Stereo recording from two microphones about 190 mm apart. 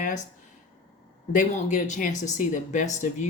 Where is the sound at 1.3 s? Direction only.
40° left (ahead or behind).